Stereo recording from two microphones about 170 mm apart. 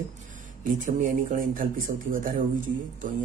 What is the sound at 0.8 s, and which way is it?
Speech, 50° right (ahead or behind).